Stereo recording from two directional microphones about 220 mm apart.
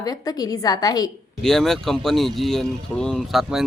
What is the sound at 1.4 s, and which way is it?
Speech, centre (ahead or behind).